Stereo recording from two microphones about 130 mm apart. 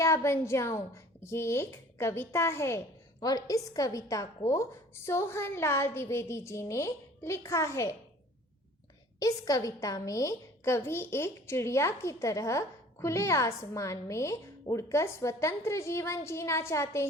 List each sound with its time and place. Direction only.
0.0 s a woman's voice: 20° left (ahead or behind)
9.1 s a woman's voice: 25° left (ahead or behind)